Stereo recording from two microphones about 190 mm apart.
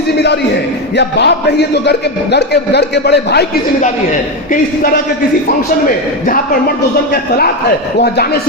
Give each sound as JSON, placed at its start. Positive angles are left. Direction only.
{"t": 0.9, "sound": "a man's voice", "side_deg": 65}
{"t": 6.2, "sound": "a man's voice", "side_deg": 50}